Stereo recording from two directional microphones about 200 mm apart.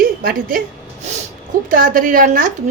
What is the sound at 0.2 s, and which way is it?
Speech, 45° right (ahead or behind).